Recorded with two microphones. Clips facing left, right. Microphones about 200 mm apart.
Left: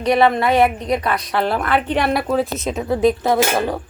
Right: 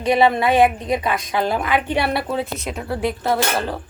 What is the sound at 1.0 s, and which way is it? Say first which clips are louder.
A woman's voice: left 1 dB; 15° right (ahead or behind).